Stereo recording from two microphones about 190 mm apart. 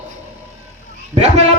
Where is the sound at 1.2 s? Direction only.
35° right (ahead or behind).